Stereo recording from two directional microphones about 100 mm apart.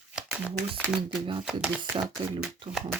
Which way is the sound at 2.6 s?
55° right (ahead or behind).